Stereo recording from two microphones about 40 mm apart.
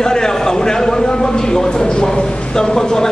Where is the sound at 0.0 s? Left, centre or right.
Centre.